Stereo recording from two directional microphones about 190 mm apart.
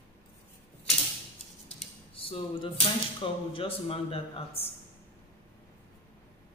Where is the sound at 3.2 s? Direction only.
25° left (ahead or behind).